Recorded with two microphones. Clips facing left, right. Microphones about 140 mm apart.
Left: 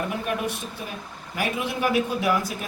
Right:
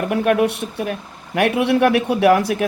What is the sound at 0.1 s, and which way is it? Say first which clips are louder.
A man's voice: right 11 dB; 65° right (ahead or behind).